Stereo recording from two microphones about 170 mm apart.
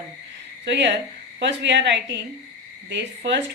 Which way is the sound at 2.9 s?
90° right.